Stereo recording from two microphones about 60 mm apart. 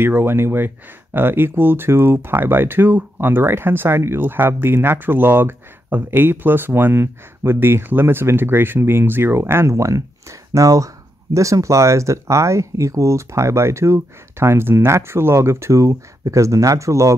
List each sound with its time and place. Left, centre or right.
0.2 s speech: right
9.8 s speech: right